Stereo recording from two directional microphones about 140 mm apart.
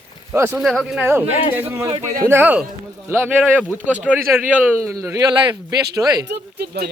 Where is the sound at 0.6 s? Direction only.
Centre (ahead or behind).